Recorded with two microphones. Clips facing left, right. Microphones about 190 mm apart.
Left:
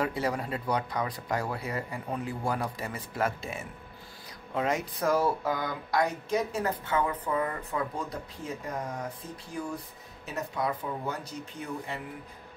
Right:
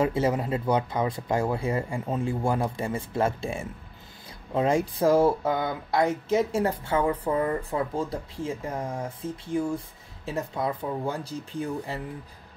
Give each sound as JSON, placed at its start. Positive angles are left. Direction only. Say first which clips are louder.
{"t": 0.0, "sound": "speech", "louder": "right 6 dB", "side_deg": -25}